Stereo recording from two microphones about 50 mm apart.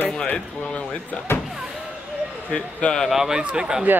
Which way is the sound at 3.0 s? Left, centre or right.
Centre.